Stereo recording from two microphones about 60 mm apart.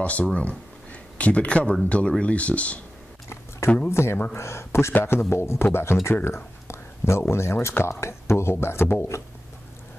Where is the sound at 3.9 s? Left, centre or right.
Left.